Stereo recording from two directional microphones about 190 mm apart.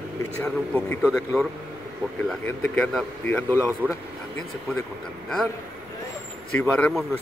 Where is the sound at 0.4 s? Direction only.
10° left (ahead or behind).